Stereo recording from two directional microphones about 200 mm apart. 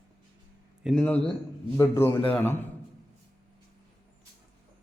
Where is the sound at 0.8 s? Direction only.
5° left (ahead or behind).